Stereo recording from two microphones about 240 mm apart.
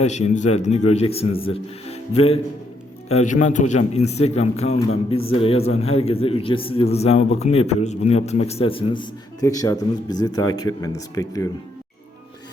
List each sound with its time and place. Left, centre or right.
0.0 s a man's voice: left